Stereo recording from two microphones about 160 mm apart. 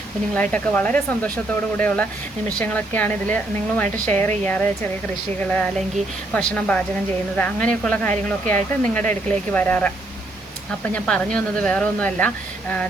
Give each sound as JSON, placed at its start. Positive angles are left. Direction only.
{"t": 0.5, "sound": "speech", "side_deg": 10}